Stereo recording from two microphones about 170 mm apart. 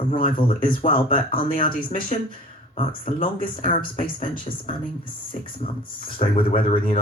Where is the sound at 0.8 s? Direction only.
50° left (ahead or behind).